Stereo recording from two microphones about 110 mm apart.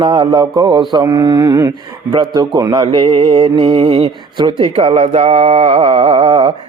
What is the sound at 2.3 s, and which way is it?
Mantra, 35° right (ahead or behind).